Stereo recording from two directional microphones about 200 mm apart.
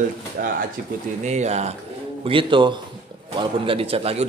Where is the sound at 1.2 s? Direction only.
35° right (ahead or behind).